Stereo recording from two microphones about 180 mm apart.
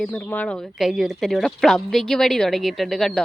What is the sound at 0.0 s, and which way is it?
A woman's voice, 10° left (ahead or behind).